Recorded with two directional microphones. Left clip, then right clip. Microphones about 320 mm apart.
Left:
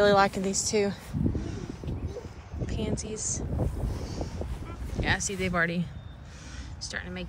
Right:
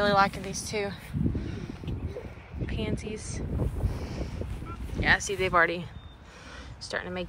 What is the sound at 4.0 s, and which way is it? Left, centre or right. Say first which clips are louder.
Vehicle: left 2 dB; centre.